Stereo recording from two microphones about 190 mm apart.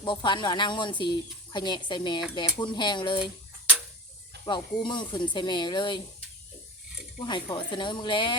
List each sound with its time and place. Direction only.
0.0 s speech: 25° left (ahead or behind)
4.4 s speech: 25° left (ahead or behind)
7.3 s speech: 25° left (ahead or behind)